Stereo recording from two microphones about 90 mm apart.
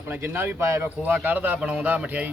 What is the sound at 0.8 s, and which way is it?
Speech, 20° right (ahead or behind).